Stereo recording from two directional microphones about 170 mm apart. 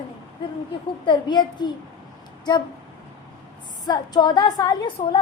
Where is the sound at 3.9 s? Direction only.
25° left (ahead or behind).